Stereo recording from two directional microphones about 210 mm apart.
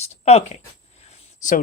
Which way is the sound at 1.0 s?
35° left (ahead or behind).